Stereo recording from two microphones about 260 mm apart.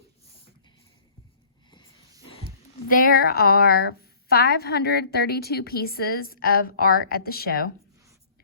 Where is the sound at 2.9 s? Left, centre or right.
Left.